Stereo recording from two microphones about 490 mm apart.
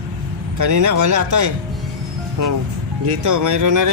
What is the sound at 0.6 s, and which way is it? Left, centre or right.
Speech, right.